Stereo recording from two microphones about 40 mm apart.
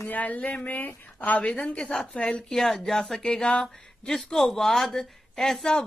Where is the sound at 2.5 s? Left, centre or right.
Centre.